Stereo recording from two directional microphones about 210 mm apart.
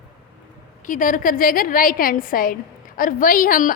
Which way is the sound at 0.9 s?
40° left (ahead or behind).